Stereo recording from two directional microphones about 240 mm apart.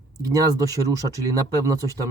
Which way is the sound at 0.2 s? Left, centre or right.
Centre.